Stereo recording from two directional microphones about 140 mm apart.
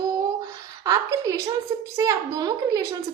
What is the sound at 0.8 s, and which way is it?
A woman's voice, 25° right (ahead or behind).